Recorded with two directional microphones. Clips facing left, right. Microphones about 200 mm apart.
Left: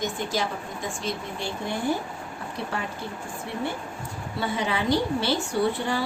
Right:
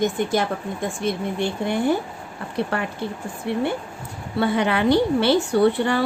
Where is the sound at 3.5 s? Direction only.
65° right (ahead or behind).